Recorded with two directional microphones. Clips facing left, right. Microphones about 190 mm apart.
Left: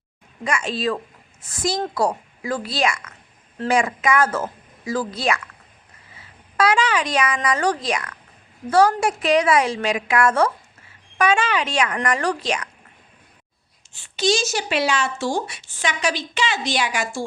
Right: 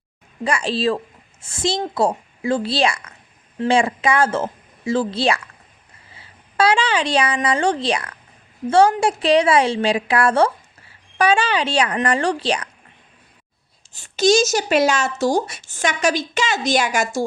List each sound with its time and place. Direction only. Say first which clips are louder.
0.4 s a woman's voice: right 3 dB; 35° right (ahead or behind)
13.9 s speech: right 6 dB; 45° right (ahead or behind)